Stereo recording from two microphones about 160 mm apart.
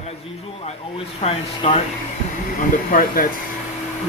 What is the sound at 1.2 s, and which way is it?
Speech, 30° left (ahead or behind).